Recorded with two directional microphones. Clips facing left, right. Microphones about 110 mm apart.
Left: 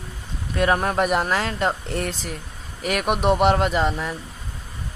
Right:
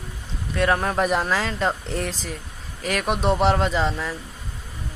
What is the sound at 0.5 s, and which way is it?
Speech, 5° left (ahead or behind).